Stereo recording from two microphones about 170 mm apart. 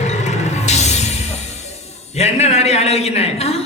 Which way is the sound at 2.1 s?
40° left (ahead or behind).